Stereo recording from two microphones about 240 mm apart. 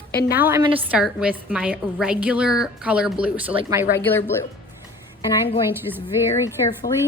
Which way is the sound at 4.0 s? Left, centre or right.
Centre.